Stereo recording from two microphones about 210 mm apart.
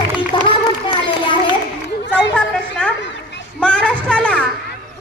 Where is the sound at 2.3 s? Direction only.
5° left (ahead or behind).